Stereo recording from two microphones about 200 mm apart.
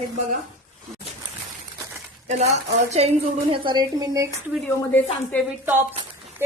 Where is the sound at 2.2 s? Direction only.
35° right (ahead or behind); by 4.4 s 15° right (ahead or behind).